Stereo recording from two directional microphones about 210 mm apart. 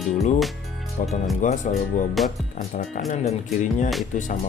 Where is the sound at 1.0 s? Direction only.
35° left (ahead or behind).